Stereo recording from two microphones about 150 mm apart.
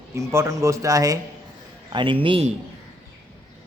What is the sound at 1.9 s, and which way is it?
Speech, 35° right (ahead or behind).